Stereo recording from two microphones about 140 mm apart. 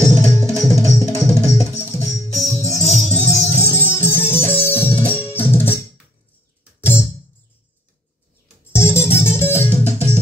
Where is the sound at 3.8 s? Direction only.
15° left (ahead or behind).